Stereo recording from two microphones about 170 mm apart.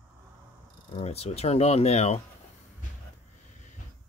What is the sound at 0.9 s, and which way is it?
Speech, 35° left (ahead or behind).